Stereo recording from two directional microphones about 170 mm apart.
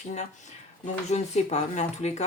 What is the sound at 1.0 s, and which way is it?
Speech, 40° left (ahead or behind).